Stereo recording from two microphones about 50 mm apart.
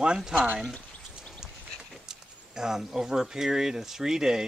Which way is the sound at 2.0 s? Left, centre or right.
Centre.